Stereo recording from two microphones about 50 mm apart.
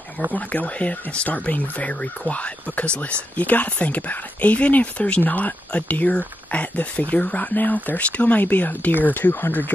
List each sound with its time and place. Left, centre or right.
0.3 s speech: left